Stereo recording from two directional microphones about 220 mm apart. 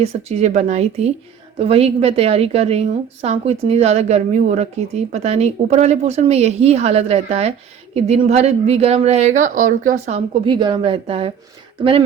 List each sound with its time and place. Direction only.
0.0 s a woman's voice: 30° right (ahead or behind)